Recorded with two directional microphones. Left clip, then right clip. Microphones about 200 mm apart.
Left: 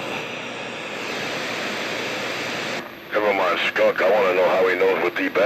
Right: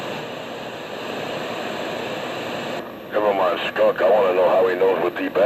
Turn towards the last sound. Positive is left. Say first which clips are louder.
# even
turn(degrees=15)  # may be behind; listen again after turning